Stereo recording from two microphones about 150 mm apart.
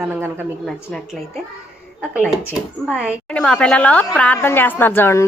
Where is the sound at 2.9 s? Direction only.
10° right (ahead or behind).